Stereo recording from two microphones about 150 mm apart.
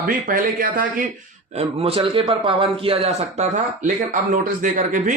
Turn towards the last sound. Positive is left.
turn(degrees=-60)  # may be behind; listen again after turning